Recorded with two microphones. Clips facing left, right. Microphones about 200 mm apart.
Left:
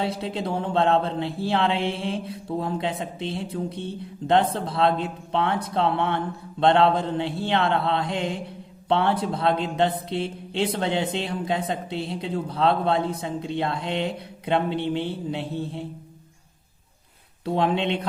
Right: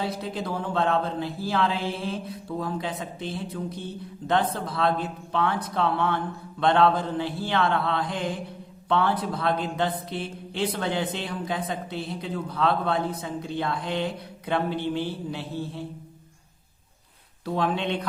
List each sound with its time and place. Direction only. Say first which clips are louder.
0.0 s speech: left 3 dB; 30° left (ahead or behind)
17.4 s speech: left 3 dB; 25° left (ahead or behind)